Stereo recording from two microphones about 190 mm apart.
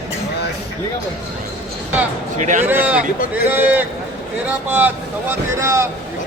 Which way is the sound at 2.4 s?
40° right (ahead or behind).